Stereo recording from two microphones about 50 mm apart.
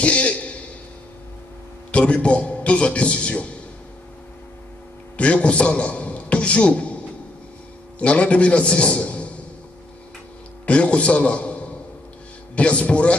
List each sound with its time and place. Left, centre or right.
0.0 s a man's voice: left
1.9 s a man's voice: left
5.1 s a man's voice: left
8.0 s a man's voice: left
10.6 s a man's voice: left